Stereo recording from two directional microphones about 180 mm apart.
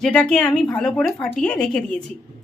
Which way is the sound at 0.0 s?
5° left (ahead or behind).